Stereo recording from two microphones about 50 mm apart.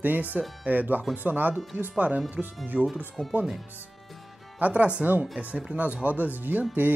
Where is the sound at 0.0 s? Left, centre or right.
Right.